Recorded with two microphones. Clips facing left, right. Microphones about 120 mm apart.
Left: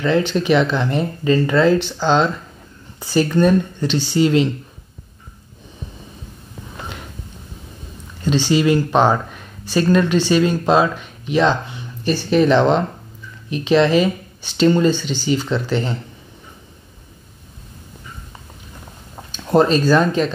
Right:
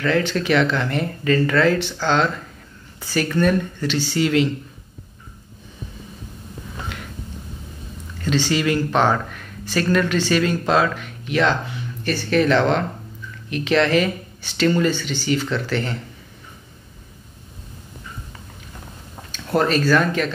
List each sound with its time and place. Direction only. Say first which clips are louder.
0.0 s speech: left 3 dB; 20° left (ahead or behind)
8.2 s speech: left 4 dB; 20° left (ahead or behind)
19.3 s speech: left 5 dB; 20° left (ahead or behind)